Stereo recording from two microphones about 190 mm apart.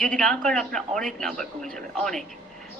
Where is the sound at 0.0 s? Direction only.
5° left (ahead or behind).